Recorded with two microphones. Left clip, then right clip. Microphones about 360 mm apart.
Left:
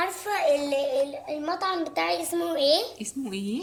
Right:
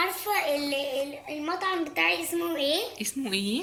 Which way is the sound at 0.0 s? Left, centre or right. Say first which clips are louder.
Left 1 dB; left.